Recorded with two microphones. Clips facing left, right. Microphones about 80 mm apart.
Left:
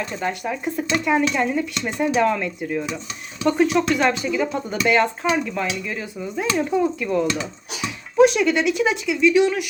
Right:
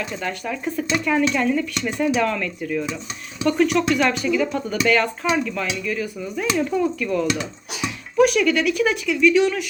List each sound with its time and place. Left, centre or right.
0.0 s speech: left